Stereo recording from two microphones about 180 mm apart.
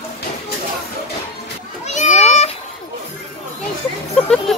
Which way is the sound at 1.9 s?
40° left (ahead or behind).